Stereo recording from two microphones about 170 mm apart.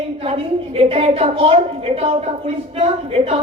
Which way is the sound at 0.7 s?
35° right (ahead or behind).